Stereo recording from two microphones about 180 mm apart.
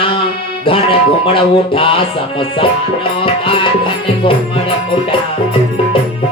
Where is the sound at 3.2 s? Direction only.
30° left (ahead or behind).